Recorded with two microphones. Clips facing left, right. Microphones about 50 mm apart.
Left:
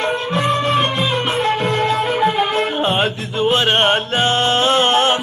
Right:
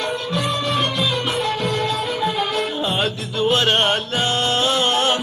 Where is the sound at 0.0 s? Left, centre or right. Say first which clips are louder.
Left 4 dB; left.